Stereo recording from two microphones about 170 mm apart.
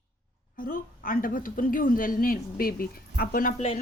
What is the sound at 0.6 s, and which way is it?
A woman's voice, 55° left (ahead or behind).